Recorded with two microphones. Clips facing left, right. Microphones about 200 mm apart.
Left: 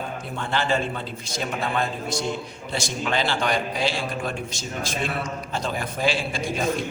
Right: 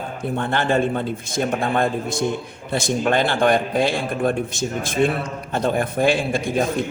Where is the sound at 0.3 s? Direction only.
55° right (ahead or behind).